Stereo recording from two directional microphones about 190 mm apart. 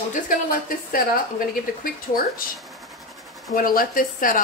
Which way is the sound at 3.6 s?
50° left (ahead or behind).